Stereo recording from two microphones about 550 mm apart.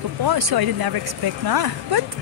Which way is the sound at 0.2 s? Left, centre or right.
Right.